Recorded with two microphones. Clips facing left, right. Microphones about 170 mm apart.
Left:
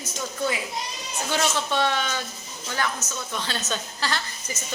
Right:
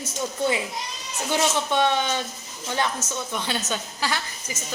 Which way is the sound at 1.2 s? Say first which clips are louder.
Right 2 dB; 15° right (ahead or behind).